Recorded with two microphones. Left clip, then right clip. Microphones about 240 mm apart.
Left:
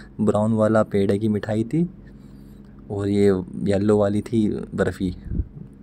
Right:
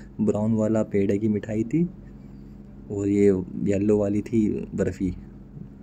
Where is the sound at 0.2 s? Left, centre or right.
Centre.